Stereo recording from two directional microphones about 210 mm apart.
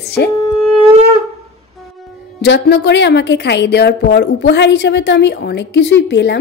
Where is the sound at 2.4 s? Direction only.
55° left (ahead or behind).